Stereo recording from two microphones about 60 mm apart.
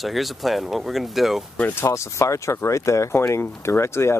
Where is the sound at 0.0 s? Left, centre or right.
Centre.